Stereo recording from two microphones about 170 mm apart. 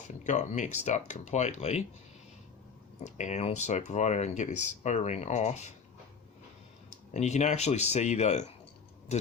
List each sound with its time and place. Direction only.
0.3 s speech: 45° left (ahead or behind)
3.0 s speech: 45° left (ahead or behind)
7.1 s speech: 40° left (ahead or behind)